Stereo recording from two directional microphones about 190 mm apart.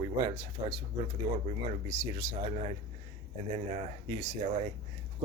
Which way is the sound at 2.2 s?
15° right (ahead or behind).